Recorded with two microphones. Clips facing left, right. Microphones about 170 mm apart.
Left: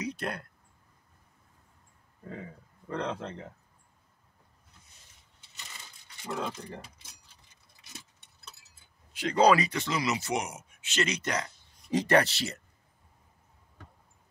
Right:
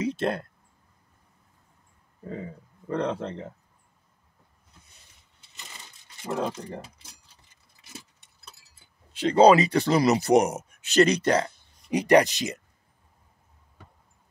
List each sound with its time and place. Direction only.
0.0 s a sound: 25° right (ahead or behind)
2.2 s speech: 30° right (ahead or behind)
6.2 s speech: 40° right (ahead or behind)
9.1 s speech: 25° right (ahead or behind)
11.9 s speech: 15° right (ahead or behind)